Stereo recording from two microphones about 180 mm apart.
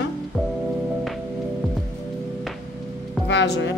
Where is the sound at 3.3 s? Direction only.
80° left.